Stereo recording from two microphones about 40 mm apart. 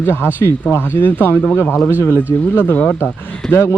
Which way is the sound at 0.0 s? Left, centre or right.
Left.